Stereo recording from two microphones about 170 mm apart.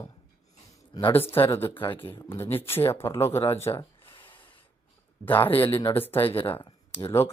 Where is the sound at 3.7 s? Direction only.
30° left (ahead or behind).